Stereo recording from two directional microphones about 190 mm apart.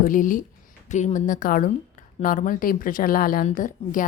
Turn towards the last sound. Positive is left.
turn(degrees=45)  # may be behind; listen again after turning